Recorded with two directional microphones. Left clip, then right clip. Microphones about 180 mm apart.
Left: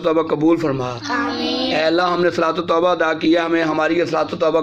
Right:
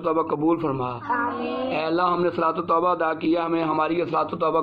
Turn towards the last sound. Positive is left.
turn(degrees=5)  # may be behind; listen again after turning